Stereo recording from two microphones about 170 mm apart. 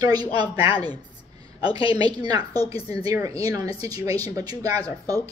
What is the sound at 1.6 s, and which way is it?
Speech, 35° left (ahead or behind).